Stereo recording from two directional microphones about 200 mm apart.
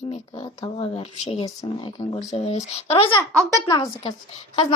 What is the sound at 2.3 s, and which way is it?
Speech, 30° left (ahead or behind).